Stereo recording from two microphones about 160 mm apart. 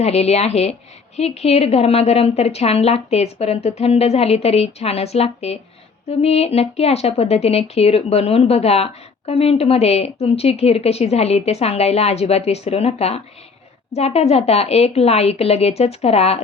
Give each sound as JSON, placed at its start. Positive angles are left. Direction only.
{"t": 0.0, "sound": "speech", "side_deg": 40}